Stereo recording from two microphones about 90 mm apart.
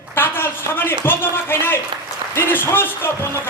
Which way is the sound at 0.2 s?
25° left (ahead or behind).